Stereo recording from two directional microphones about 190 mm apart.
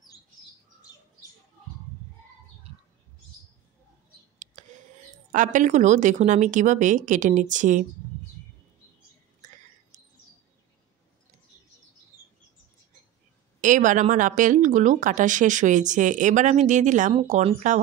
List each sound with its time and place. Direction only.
4.4 s a sound: 40° right (ahead or behind)
5.3 s a woman's voice: 40° right (ahead or behind)
13.6 s a woman's voice: 40° right (ahead or behind)